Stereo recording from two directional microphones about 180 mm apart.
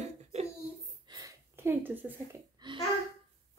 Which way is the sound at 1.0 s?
20° right (ahead or behind).